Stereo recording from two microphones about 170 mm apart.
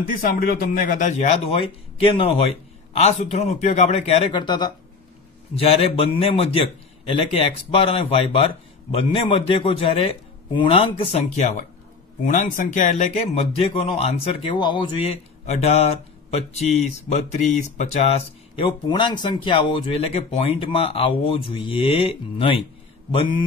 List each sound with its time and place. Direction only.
0.0 s a man's voice: 55° left (ahead or behind); by 4.7 s 25° left (ahead or behind)
5.6 s a man's voice: 35° left (ahead or behind)